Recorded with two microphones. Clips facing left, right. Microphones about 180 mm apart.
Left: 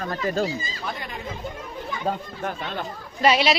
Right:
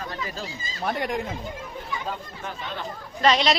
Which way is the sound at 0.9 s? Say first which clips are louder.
Right 9 dB; 70° right (ahead or behind).